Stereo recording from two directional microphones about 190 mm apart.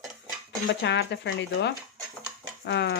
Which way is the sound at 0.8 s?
65° left (ahead or behind).